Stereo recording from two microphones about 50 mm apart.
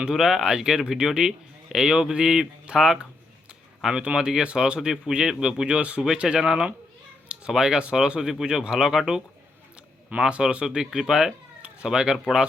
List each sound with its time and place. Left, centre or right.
0.1 s a man's voice: centre